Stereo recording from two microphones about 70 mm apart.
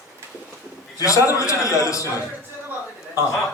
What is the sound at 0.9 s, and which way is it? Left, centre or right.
A man's voice, left.